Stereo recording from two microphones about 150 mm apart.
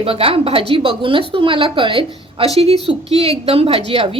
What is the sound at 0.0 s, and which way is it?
A woman's voice, 40° right (ahead or behind).